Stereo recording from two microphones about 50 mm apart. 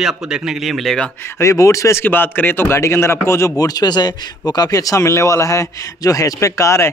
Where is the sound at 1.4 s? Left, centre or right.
Left.